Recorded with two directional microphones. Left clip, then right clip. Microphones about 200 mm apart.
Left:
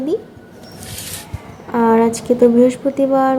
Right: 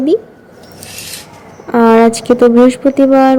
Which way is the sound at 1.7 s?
15° right (ahead or behind).